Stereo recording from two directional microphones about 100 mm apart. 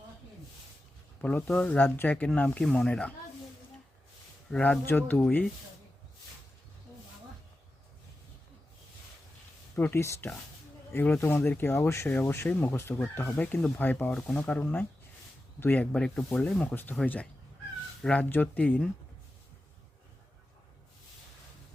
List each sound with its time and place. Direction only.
1.2 s speech: 15° left (ahead or behind)
4.5 s speech: 10° left (ahead or behind)
4.9 s speech: 20° left (ahead or behind)
9.7 s speech: 20° left (ahead or behind)
18.0 s speech: 15° left (ahead or behind)